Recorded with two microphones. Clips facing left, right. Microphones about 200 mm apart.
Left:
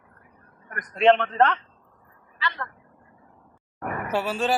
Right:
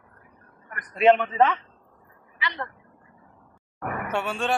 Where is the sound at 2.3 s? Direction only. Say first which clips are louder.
Left 1 dB; 15° right (ahead or behind).